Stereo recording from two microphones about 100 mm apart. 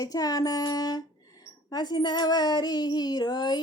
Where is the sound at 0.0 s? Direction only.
40° left (ahead or behind).